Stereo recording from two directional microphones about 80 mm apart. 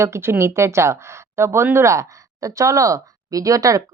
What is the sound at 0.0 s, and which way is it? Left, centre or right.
Speech, right.